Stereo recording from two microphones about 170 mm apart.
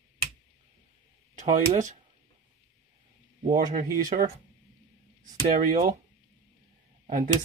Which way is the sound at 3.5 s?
55° right (ahead or behind).